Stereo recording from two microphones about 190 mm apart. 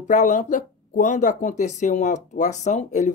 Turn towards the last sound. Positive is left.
turn(degrees=40)  # may be behind; listen again after turning